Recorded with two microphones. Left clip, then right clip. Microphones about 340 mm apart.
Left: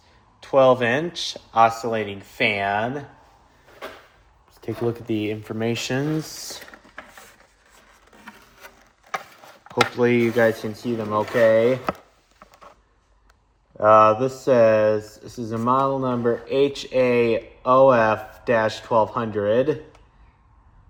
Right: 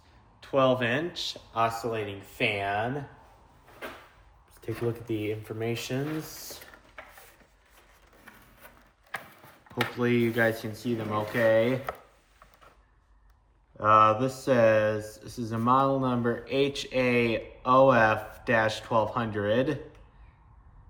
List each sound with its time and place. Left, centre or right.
0.3 s speech: centre
4.6 s speech: centre
10.0 s speech: centre
13.7 s speech: centre